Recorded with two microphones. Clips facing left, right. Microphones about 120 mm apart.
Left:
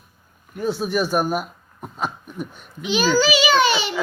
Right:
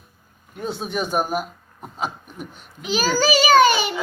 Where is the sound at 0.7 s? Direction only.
20° right (ahead or behind).